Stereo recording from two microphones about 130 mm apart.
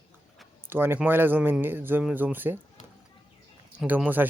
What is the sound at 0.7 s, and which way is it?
Speech, 15° right (ahead or behind).